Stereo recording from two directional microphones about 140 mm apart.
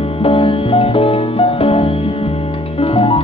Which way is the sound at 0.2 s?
40° left (ahead or behind).